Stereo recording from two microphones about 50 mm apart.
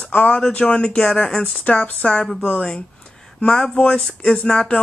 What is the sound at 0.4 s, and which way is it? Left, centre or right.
Speech, left.